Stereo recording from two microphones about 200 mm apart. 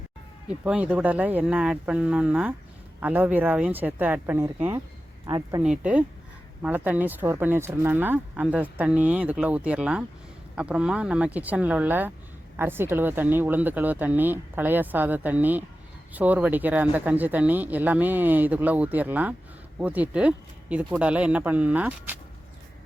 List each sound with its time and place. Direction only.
0.4 s speech: 5° right (ahead or behind)
5.6 s speech: 5° right (ahead or behind)